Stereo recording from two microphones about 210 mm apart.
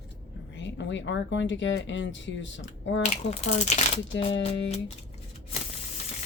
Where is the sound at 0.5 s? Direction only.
60° left (ahead or behind).